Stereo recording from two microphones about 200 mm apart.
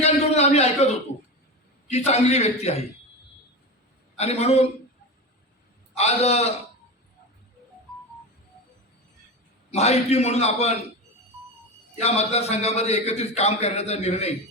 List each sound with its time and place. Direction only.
0.0 s a sound: 30° left (ahead or behind)
1.9 s a man's voice: 30° left (ahead or behind)
4.2 s a man's voice: 30° left (ahead or behind)
5.9 s a man's voice: 30° left (ahead or behind)
9.7 s a man's voice: 30° left (ahead or behind)
12.0 s a man's voice: 30° left (ahead or behind)